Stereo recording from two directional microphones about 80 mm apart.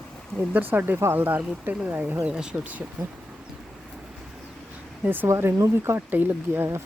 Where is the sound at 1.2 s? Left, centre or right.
Right.